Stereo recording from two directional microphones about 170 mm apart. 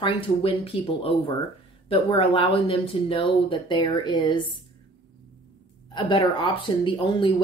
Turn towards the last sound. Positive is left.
turn(degrees=30)  # may be behind; listen again after turning